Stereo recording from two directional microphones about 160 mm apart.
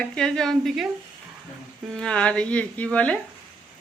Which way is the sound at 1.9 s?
5° left (ahead or behind).